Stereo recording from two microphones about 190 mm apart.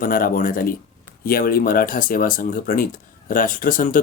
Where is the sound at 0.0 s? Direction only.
45° left (ahead or behind).